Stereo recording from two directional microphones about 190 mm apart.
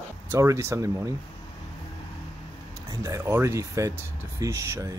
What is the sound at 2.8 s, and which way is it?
Speech, 15° right (ahead or behind).